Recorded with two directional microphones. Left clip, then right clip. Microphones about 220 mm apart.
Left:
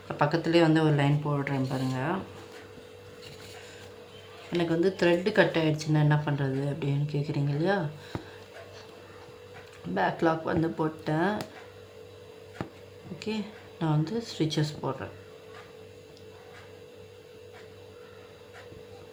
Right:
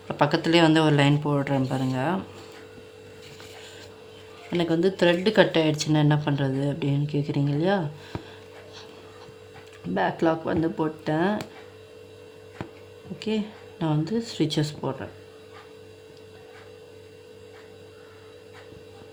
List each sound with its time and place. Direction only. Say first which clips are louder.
0.1 s speech: right 4 dB; 40° right (ahead or behind)
4.5 s speech: right 3 dB; 40° right (ahead or behind)
9.9 s speech: right 3 dB; 30° right (ahead or behind)
13.1 s speech: right 6 dB; 35° right (ahead or behind)